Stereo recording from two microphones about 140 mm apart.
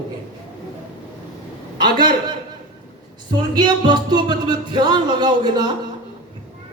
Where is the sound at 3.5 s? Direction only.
30° right (ahead or behind).